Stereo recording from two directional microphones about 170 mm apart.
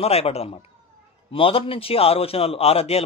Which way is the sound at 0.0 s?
35° left (ahead or behind).